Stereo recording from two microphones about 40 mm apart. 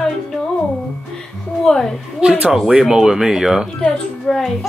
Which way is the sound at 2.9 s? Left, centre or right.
Centre.